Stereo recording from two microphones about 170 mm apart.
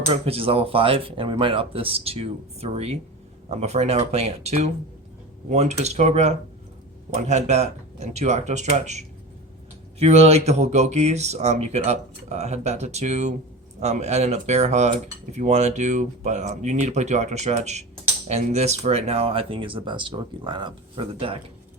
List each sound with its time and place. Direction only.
0.1 s speech: 35° right (ahead or behind)